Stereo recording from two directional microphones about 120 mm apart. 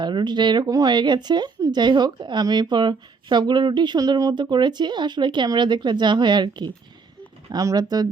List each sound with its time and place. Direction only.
0.0 s speech: 40° right (ahead or behind)